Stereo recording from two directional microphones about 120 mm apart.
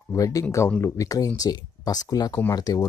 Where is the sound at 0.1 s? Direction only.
30° left (ahead or behind).